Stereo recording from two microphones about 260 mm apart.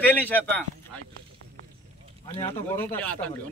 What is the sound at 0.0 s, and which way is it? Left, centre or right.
Speech, centre.